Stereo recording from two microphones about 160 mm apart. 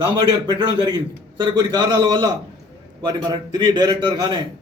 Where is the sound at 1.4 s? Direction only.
30° right (ahead or behind).